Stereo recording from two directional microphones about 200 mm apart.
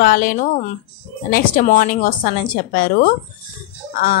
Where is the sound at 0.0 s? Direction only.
45° left (ahead or behind).